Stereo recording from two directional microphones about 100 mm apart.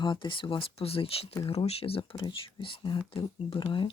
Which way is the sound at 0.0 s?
55° left (ahead or behind).